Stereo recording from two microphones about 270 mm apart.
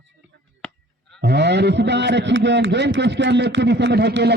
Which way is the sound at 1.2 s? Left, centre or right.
Right.